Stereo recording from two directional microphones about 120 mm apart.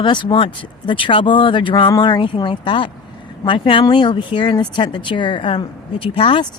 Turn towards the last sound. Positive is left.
turn(degrees=50)  # may be behind; listen again after turning